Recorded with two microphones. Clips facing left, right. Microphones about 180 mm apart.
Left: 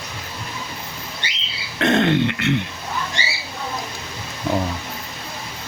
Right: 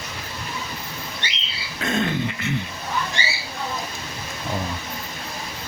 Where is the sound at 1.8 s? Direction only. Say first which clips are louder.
Left 7 dB; 70° left (ahead or behind).